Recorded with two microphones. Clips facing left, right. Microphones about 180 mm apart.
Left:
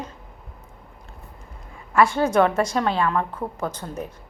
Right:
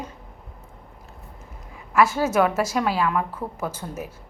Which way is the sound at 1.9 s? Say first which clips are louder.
Left 1 dB; 5° right (ahead or behind).